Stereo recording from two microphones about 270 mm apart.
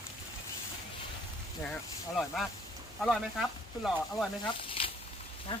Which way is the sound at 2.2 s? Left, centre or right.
Centre.